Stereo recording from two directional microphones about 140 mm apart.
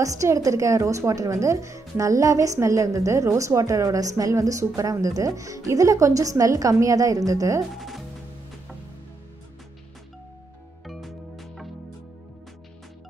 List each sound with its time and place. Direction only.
0.0 s a woman's voice: 20° right (ahead or behind)
7.7 s music: centre (ahead or behind)
10.9 s music: centre (ahead or behind)